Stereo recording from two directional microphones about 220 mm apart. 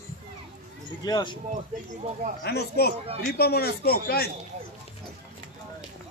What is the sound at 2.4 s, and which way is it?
Speech, 45° left (ahead or behind).